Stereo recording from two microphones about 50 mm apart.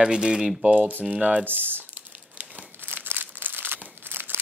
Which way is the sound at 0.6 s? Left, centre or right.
Right.